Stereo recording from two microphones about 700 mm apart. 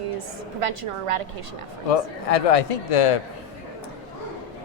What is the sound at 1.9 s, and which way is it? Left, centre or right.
A man's voice, left.